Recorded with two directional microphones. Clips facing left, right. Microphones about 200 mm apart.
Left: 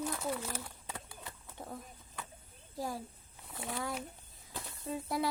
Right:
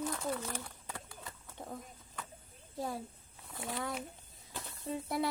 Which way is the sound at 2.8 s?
25° right (ahead or behind).